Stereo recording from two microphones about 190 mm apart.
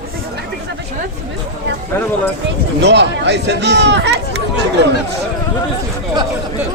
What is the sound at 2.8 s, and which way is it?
Speech, 65° right (ahead or behind).